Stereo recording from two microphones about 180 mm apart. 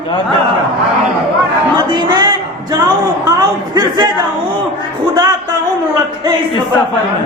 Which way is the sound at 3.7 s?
25° right (ahead or behind).